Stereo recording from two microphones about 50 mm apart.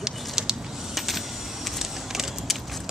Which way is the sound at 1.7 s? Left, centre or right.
Centre.